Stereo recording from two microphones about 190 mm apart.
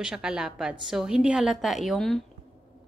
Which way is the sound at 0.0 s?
5° right (ahead or behind).